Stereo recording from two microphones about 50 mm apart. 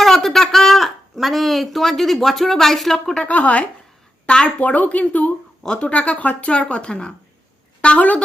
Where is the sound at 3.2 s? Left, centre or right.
Left.